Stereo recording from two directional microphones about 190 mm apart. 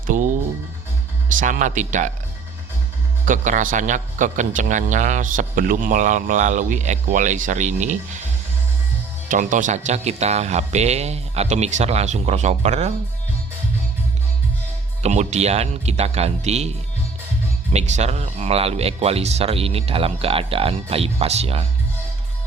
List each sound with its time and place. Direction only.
0.1 s speech: 45° right (ahead or behind)
1.4 s a man's voice: 45° right (ahead or behind)
3.2 s a man's voice: 40° right (ahead or behind)
9.3 s a man's voice: 40° right (ahead or behind)
15.0 s a man's voice: 40° right (ahead or behind)
17.7 s a man's voice: 35° right (ahead or behind)